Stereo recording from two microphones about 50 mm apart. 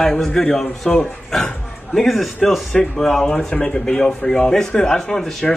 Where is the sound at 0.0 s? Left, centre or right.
Centre.